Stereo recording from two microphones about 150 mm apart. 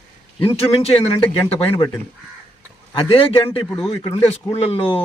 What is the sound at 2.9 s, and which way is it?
Speech, 35° left (ahead or behind).